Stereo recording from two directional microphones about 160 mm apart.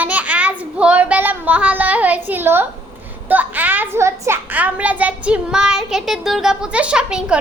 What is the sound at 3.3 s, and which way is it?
A child's voice, 10° right (ahead or behind).